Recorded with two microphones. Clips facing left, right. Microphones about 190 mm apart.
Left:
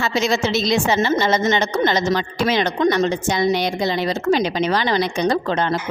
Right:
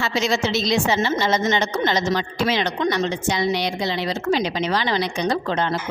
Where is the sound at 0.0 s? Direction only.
50° left (ahead or behind).